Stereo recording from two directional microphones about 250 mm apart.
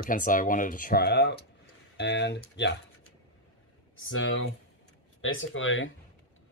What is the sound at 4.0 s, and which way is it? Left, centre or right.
Speech, left.